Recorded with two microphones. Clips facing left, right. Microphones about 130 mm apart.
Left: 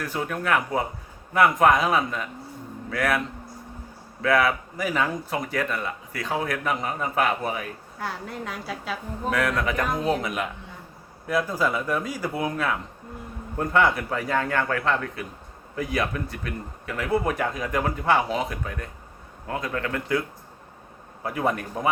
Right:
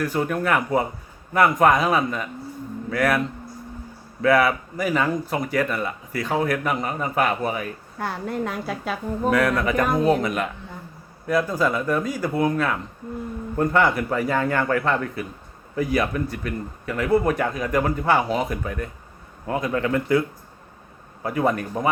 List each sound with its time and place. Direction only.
0.0 s speech: centre (ahead or behind)
4.2 s speech: 5° right (ahead or behind)
7.9 s a woman's voice: 50° right (ahead or behind)
9.3 s speech: centre (ahead or behind)
9.8 s a woman's voice: 55° right (ahead or behind)
10.2 s speech: 5° left (ahead or behind)
21.2 s speech: centre (ahead or behind)